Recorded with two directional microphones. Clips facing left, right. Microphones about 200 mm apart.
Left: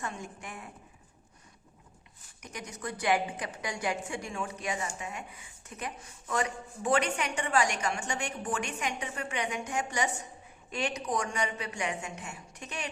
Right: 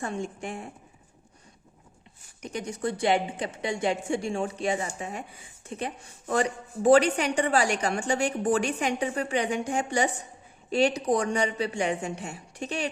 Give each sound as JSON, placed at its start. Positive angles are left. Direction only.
{"t": 0.0, "sound": "a woman's voice", "side_deg": -30}
{"t": 2.4, "sound": "a woman's voice", "side_deg": -30}